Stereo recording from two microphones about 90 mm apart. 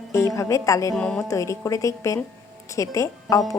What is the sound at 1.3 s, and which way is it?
Speech, 35° left (ahead or behind).